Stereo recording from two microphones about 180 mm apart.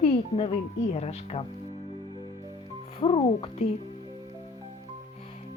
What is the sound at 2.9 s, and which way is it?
Speech, 30° left (ahead or behind).